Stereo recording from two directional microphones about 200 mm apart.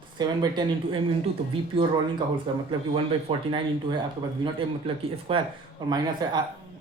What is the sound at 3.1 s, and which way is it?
Speech, 25° right (ahead or behind).